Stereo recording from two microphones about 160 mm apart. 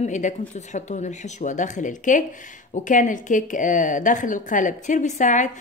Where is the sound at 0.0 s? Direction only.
50° left (ahead or behind).